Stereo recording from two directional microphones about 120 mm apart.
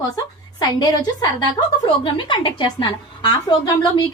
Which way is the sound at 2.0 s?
40° left (ahead or behind).